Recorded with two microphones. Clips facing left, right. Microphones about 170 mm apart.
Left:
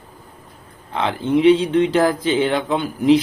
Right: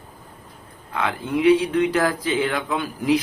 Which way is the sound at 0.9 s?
25° left (ahead or behind).